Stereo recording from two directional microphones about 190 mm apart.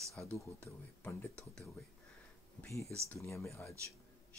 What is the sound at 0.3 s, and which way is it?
Speech, 10° left (ahead or behind).